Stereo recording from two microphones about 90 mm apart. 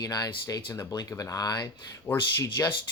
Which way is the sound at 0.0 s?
45° left (ahead or behind).